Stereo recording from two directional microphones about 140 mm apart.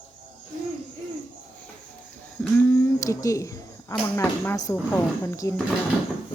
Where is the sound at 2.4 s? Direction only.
15° left (ahead or behind).